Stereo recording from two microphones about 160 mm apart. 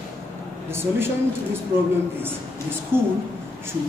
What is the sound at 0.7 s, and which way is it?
Speech, 15° right (ahead or behind).